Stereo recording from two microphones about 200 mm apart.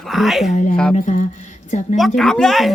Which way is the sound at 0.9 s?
40° left (ahead or behind).